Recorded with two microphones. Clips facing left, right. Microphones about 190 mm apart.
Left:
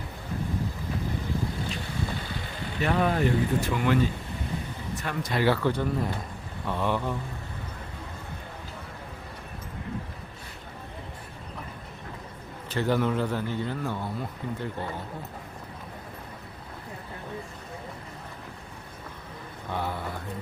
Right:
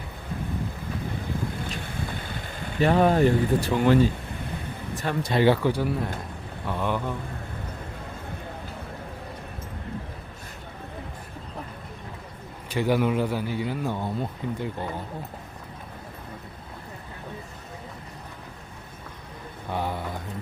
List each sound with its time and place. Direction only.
2.8 s speech: 35° right (ahead or behind)
5.0 s speech: 25° right (ahead or behind)
5.6 s speech: 10° right (ahead or behind)
12.7 s speech: 10° right (ahead or behind)
19.7 s mantra: 15° right (ahead or behind)